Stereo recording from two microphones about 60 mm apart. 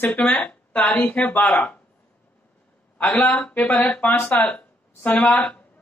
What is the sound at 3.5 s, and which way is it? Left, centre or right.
Speech, left.